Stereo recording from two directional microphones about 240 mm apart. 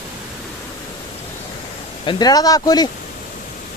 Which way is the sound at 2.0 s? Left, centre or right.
Centre.